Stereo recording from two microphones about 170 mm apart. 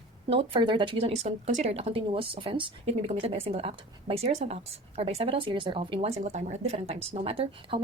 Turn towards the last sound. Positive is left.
turn(degrees=-35)  # may be behind; listen again after turning